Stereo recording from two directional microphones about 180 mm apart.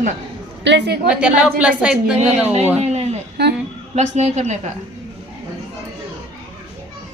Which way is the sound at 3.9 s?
40° right (ahead or behind).